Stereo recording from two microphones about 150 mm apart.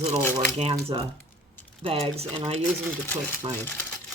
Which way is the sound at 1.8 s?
40° right (ahead or behind).